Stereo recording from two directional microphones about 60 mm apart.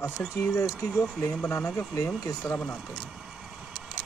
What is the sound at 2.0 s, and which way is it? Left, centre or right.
Speech, left.